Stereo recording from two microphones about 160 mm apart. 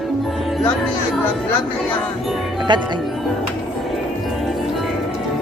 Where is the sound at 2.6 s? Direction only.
25° right (ahead or behind).